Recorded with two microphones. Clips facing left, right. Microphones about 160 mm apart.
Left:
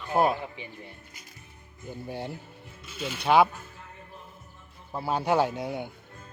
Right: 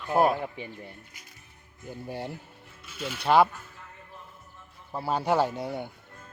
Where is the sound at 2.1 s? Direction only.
5° right (ahead or behind).